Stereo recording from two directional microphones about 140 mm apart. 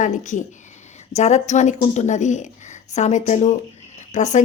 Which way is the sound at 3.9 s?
55° left (ahead or behind).